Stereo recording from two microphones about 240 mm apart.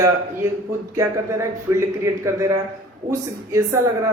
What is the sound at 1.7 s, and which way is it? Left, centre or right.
Speech, centre.